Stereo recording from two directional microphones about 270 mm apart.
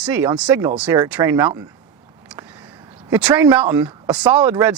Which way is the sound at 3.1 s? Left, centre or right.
Centre.